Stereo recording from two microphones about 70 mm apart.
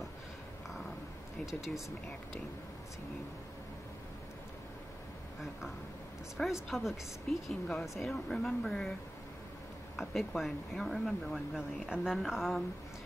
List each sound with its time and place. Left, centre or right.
1.4 s speech: centre
6.4 s speech: centre
6.7 s speech: centre
9.9 s speech: centre
11.5 s a woman's voice: centre